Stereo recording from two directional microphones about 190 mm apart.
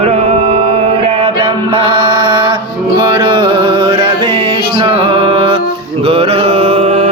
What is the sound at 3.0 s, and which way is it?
Music, 25° right (ahead or behind).